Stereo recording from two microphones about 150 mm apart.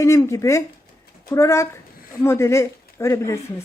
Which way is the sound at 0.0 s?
20° left (ahead or behind).